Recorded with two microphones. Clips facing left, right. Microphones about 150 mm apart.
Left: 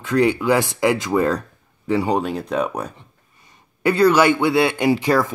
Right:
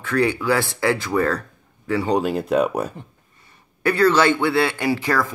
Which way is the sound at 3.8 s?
15° left (ahead or behind).